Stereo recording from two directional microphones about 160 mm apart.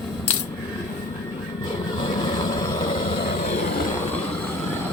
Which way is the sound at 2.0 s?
30° left (ahead or behind).